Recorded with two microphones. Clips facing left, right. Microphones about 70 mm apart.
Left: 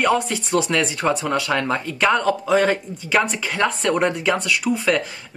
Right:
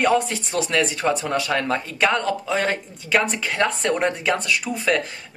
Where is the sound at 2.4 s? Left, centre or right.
Centre.